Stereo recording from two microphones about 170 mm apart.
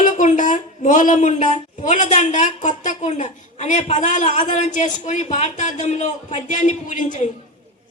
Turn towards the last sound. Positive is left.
turn(degrees=45)  # may be behind; listen again after turning